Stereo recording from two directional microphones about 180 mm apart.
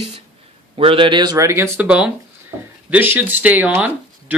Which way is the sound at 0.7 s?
30° right (ahead or behind).